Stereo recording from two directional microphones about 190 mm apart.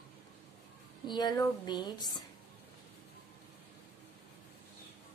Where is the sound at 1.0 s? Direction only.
20° left (ahead or behind).